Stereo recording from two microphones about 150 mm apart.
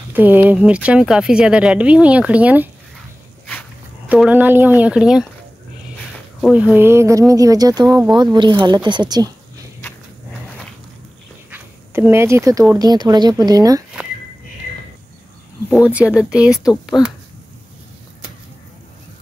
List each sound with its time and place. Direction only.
0.1 s a woman's voice: 10° right (ahead or behind)
4.1 s a woman's voice: 10° right (ahead or behind)
6.4 s speech: 10° right (ahead or behind); by 9.3 s 30° right (ahead or behind)
11.5 s a sound: 15° right (ahead or behind)
12.7 s speech: 25° right (ahead or behind)
15.9 s speech: 10° right (ahead or behind)